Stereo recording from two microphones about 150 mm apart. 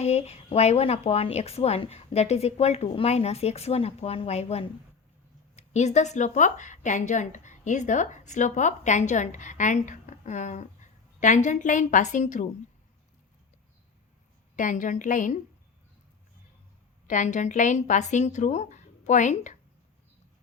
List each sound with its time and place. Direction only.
0.0 s a woman's voice: 45° left (ahead or behind)
14.5 s a woman's voice: 60° left (ahead or behind)
17.1 s a woman's voice: 55° left (ahead or behind)